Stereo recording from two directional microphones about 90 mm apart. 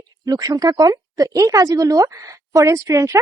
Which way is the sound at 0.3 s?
45° right (ahead or behind).